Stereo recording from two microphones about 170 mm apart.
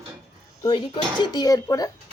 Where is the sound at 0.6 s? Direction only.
25° left (ahead or behind).